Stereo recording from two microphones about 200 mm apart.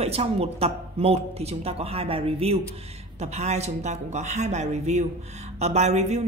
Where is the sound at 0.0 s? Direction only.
30° right (ahead or behind).